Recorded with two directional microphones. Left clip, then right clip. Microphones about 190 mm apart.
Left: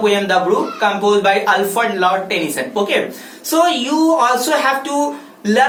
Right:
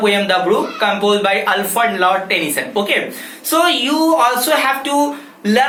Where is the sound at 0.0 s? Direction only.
5° right (ahead or behind).